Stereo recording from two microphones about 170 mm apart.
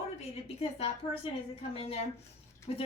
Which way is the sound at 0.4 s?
35° left (ahead or behind).